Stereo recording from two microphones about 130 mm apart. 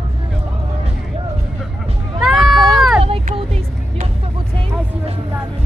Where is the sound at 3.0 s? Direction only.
50° right (ahead or behind).